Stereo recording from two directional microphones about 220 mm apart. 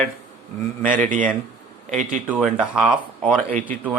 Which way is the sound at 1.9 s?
35° right (ahead or behind).